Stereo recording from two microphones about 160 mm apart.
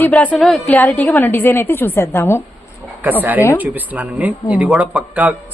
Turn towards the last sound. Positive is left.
turn(degrees=-10)  # may be behind; listen again after turning